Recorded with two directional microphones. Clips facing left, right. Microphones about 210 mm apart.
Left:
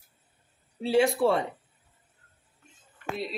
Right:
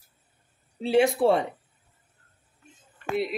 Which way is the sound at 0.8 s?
20° right (ahead or behind).